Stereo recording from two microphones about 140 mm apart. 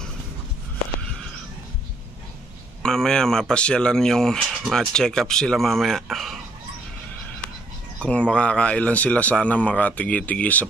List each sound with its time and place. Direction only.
2.8 s speech: 5° left (ahead or behind)
8.0 s speech: 5° left (ahead or behind)